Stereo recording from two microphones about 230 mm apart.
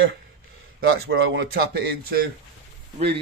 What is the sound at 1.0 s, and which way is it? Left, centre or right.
Speech, right.